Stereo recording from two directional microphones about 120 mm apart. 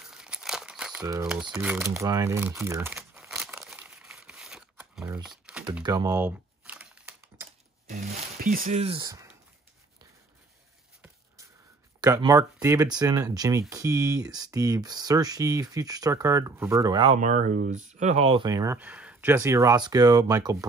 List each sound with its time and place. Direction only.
0.1 s crumpling: 5° right (ahead or behind)
1.2 s speech: 5° right (ahead or behind)
1.8 s speech: 25° right (ahead or behind)
2.9 s crumpling: 5° right (ahead or behind)
5.2 s typing: 5° right (ahead or behind)
5.9 s speech: 30° right (ahead or behind)
6.1 s typing: 10° right (ahead or behind)
8.5 s speech: 90° right
9.0 s speech: 30° right (ahead or behind)
12.3 s speech: 30° right (ahead or behind)
17.2 s speech: 85° right; by 18.5 s 50° right (ahead or behind)
18.5 s speech: 30° right (ahead or behind)
18.8 s speech: 10° right (ahead or behind); by 20.5 s 30° right (ahead or behind)